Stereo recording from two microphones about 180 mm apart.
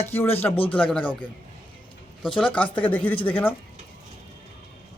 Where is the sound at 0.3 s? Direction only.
10° left (ahead or behind).